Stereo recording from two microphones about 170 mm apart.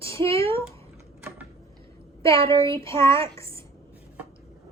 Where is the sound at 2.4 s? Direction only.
30° right (ahead or behind).